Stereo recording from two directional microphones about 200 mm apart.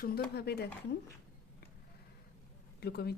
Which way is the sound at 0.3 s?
55° left (ahead or behind).